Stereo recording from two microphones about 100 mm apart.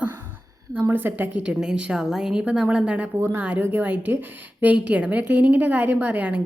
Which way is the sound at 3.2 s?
25° right (ahead or behind).